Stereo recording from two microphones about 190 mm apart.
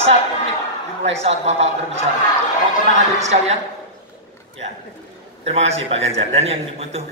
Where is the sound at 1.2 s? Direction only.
35° right (ahead or behind).